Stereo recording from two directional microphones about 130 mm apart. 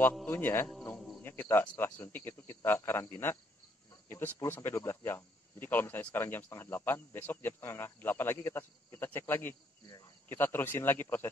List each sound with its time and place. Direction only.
0.0 s speech: 10° left (ahead or behind)